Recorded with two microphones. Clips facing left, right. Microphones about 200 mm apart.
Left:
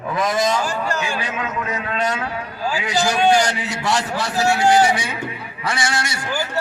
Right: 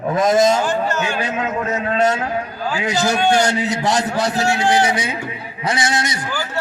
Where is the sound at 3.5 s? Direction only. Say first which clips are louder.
Right 4 dB; 20° right (ahead or behind).